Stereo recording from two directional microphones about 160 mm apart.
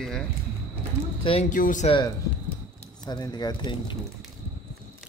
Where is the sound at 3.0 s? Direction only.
25° left (ahead or behind).